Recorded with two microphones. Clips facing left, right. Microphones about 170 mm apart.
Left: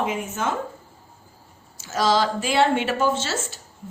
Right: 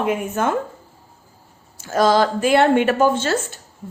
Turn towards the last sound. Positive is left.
turn(degrees=-55)  # may be behind; listen again after turning